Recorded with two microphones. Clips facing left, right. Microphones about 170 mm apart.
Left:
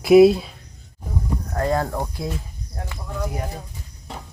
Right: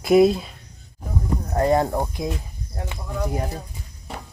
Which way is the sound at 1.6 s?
20° right (ahead or behind).